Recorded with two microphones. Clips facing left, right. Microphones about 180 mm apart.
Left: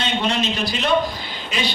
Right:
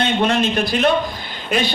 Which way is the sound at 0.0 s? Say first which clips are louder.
Right 5 dB; 55° right (ahead or behind).